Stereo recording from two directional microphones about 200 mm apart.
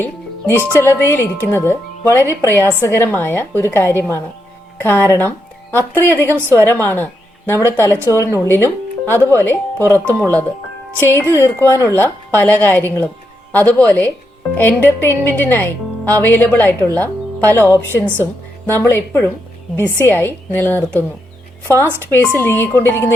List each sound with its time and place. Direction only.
0.0 s music: 10° left (ahead or behind)
0.7 s a woman's voice: 10° left (ahead or behind)